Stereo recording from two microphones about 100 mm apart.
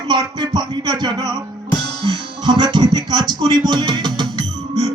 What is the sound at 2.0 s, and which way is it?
Speech, 50° right (ahead or behind).